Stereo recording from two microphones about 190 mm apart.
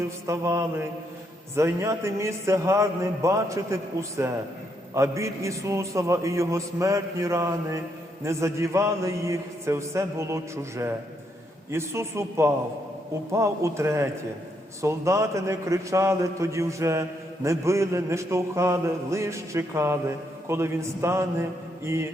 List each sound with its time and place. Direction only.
0.3 s a man's voice: 15° right (ahead or behind)